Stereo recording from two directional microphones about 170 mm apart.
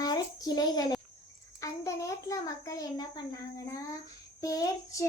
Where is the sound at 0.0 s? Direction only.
25° left (ahead or behind).